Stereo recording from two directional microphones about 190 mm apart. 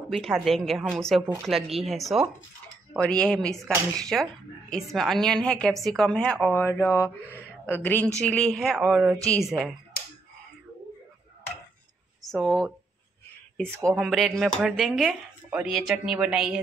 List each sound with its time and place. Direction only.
0.1 s speech: centre (ahead or behind)
9.9 s finger snapping: 50° left (ahead or behind)
12.3 s speech: centre (ahead or behind)
13.7 s speech: 10° right (ahead or behind)
13.9 s speech: centre (ahead or behind)